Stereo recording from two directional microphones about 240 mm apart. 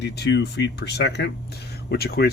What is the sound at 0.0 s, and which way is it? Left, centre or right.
Speech, left.